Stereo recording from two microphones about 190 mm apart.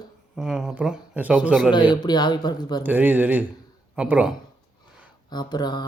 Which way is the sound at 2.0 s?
20° left (ahead or behind).